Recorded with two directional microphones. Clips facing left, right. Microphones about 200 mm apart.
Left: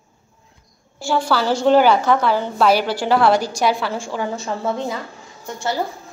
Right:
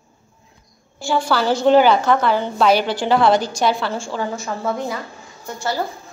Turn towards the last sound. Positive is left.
turn(degrees=20)  # may be behind; listen again after turning